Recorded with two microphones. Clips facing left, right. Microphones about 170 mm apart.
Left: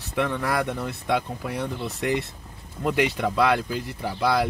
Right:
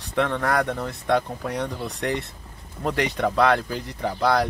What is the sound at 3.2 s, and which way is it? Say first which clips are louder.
Speech: right 2 dB; 55° right (ahead or behind).